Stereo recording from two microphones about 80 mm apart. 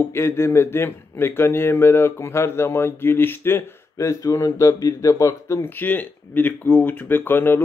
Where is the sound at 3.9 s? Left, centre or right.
Left.